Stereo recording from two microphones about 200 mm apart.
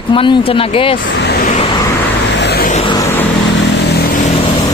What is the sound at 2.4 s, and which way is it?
Vehicle, 55° left (ahead or behind).